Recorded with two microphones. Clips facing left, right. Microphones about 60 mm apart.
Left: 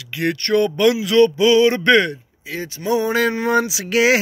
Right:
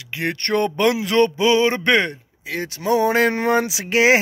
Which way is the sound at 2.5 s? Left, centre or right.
Right.